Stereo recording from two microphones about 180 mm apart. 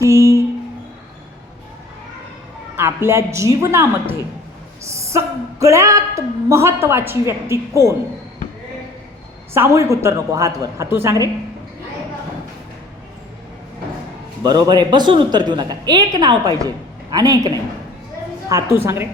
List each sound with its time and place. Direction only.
0.0 s music: 15° right (ahead or behind)
2.7 s a woman's voice: 15° right (ahead or behind)
9.6 s a woman's voice: 15° right (ahead or behind)
14.4 s a woman's voice: 20° right (ahead or behind)